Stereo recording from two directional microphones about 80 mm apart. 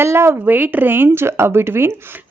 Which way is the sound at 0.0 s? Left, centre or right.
Right.